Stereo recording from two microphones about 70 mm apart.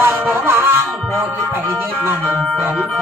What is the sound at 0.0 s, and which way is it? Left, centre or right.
Music, right.